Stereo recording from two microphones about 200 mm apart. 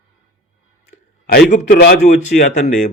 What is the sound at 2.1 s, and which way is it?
Speech, 35° left (ahead or behind).